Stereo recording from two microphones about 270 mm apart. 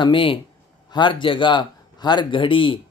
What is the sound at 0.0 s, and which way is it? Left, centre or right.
Speech, centre.